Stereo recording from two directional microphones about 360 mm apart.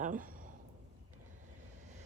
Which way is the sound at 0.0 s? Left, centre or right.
Right.